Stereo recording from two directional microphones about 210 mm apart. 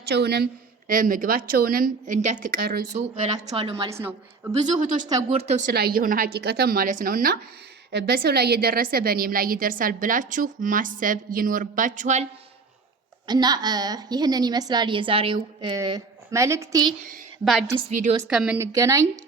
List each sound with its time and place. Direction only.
0.1 s a woman's voice: 50° right (ahead or behind)
0.9 s a woman's voice: 40° right (ahead or behind)
3.5 s a woman's voice: 25° right (ahead or behind)
3.8 s a woman's voice: 10° right (ahead or behind)
4.8 s a woman's voice: 40° right (ahead or behind)
5.0 s a woman's voice: 25° right (ahead or behind)
5.7 s a woman's voice: 45° right (ahead or behind)
13.2 s a woman's voice: 20° right (ahead or behind)
18.3 s a woman's voice: 5° right (ahead or behind)